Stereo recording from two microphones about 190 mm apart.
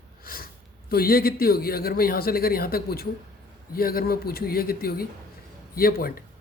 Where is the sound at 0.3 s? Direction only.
50° left (ahead or behind).